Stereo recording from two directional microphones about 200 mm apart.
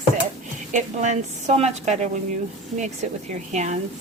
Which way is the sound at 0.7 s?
35° right (ahead or behind).